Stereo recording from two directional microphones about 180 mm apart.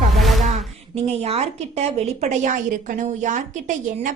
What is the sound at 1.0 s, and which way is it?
A woman's voice, 35° right (ahead or behind).